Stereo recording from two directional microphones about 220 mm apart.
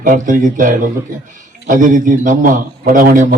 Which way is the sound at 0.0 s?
40° right (ahead or behind).